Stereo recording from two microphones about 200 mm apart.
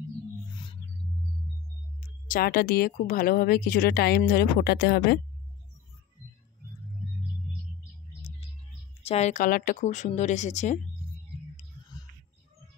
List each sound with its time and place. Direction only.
2.0 s speech: 40° left (ahead or behind)
9.0 s speech: 35° left (ahead or behind)